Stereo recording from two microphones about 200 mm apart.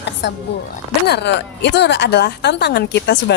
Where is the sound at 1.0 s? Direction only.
55° left (ahead or behind).